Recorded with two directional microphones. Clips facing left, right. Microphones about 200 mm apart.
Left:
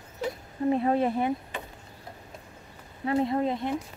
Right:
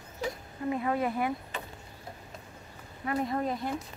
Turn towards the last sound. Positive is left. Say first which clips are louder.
# left 4 dB
turn(degrees=25)  # may be behind; listen again after turning